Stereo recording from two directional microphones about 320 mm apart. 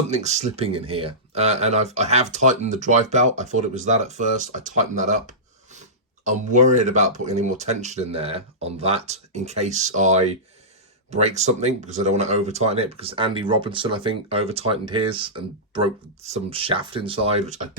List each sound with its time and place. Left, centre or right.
0.1 s speech: right